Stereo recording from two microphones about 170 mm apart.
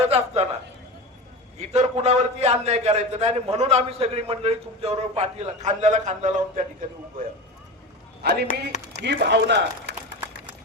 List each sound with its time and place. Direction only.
0.0 s a man's voice: 35° right (ahead or behind)
1.5 s a man's voice: 40° right (ahead or behind)
8.2 s a man's voice: 75° right (ahead or behind)
8.9 s speech: 85° right